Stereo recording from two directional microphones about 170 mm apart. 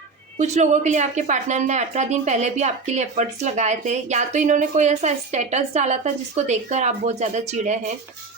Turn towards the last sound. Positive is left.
turn(degrees=-45)  # may be behind; listen again after turning